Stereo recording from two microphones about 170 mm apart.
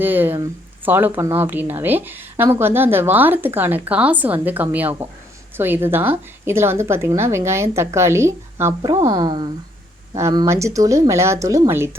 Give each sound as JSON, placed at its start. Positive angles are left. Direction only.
{"t": 0.0, "sound": "a woman's voice", "side_deg": -10}